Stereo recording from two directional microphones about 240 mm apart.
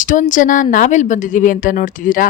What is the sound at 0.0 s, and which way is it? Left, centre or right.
Speech, left.